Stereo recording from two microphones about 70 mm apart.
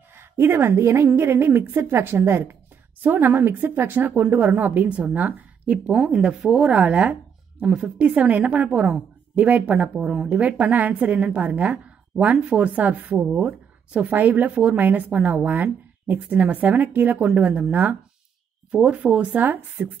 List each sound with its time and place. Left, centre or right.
0.1 s a woman's voice: right